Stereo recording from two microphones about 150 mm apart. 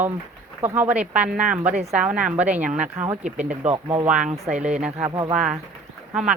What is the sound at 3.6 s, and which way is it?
Speech, 50° right (ahead or behind).